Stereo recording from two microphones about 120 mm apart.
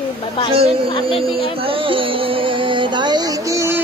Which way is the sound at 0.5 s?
55° right (ahead or behind).